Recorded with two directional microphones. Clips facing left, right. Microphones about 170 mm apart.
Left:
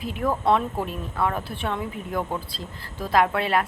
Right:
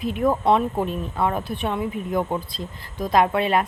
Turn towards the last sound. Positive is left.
turn(degrees=-20)  # may be behind; listen again after turning